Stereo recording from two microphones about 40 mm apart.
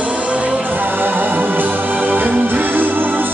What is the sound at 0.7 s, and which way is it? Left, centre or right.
Music, right.